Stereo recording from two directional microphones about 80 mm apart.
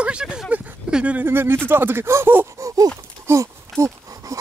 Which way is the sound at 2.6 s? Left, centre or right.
Right.